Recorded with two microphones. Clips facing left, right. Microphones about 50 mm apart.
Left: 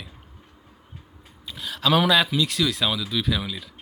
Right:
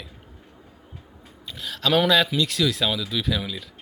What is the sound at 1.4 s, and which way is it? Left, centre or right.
A child's voice, centre.